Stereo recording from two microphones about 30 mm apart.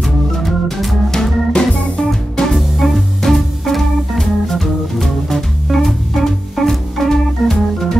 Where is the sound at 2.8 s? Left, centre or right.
Centre.